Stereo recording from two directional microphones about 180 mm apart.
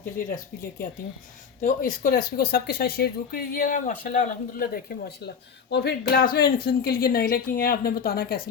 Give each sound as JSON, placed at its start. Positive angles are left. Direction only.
{"t": 1.6, "sound": "speech", "side_deg": 50}